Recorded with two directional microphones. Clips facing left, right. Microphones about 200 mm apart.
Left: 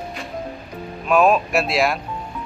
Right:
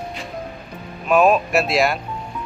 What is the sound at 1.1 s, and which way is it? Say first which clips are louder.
Speech: right 1 dB; centre (ahead or behind).